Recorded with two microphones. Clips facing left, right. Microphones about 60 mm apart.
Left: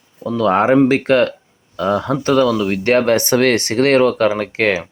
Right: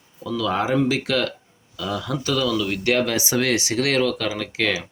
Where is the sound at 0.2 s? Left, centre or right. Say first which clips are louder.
Left 8 dB; left.